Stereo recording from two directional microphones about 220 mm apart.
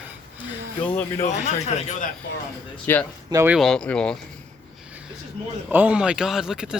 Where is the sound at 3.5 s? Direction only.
Centre (ahead or behind).